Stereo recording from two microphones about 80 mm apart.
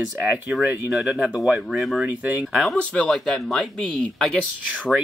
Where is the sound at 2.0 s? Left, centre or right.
Centre.